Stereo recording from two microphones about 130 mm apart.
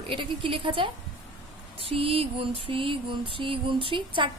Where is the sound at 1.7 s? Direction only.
45° right (ahead or behind).